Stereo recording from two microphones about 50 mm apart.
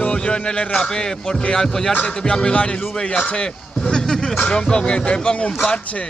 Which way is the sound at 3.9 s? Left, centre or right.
Centre.